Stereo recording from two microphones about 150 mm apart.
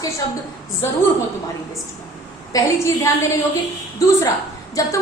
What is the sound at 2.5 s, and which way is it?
A woman's voice, 20° left (ahead or behind).